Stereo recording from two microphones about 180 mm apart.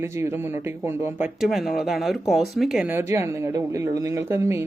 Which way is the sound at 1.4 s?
Centre (ahead or behind).